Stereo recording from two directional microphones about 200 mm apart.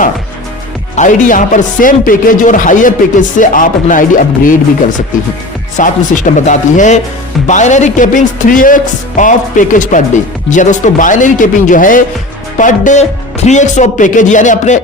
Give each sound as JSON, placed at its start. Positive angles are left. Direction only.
{"t": 0.9, "sound": "speech", "side_deg": 40}